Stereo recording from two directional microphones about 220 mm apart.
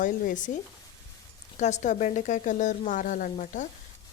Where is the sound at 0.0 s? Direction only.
35° left (ahead or behind).